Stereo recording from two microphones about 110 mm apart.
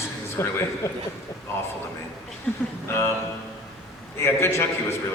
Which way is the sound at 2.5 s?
10° left (ahead or behind).